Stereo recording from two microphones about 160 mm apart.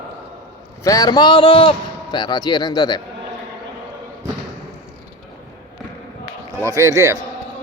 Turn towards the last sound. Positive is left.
turn(degrees=-20)  # may be behind; listen again after turning